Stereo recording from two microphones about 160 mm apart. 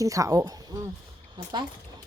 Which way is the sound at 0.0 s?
20° right (ahead or behind).